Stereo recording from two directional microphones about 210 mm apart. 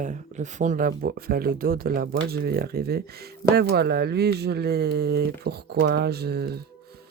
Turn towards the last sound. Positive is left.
turn(degrees=-50)  # may be behind; listen again after turning